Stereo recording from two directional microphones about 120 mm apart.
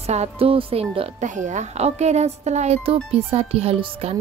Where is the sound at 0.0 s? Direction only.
65° right (ahead or behind).